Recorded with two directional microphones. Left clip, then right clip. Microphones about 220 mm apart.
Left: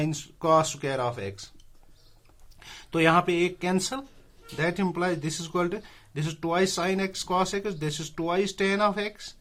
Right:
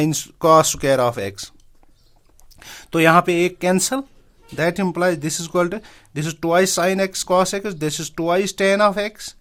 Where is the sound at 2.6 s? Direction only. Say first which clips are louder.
Right 7 dB; 45° right (ahead or behind).